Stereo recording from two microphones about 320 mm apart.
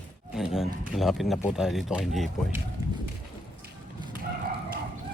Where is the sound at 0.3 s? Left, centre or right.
Centre.